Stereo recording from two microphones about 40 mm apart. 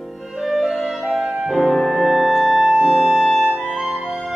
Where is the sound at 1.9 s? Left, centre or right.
Centre.